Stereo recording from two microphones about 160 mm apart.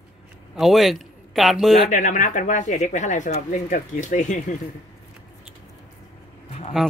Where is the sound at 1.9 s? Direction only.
50° left (ahead or behind).